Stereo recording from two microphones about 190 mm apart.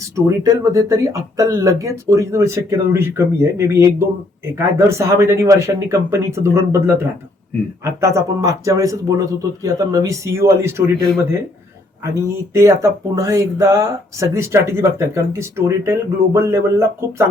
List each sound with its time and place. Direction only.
0.3 s speech: 15° right (ahead or behind)
12.5 s speech: 15° right (ahead or behind)